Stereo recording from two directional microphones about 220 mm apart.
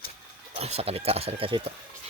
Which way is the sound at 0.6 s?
25° right (ahead or behind).